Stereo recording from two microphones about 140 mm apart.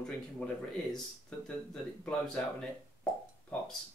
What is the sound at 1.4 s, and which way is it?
Speech, 5° left (ahead or behind).